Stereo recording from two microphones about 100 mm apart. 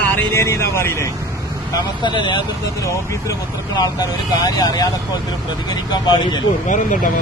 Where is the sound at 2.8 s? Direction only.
35° left (ahead or behind).